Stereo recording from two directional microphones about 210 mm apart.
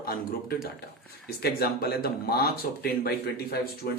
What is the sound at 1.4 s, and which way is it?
Speech, 50° left (ahead or behind).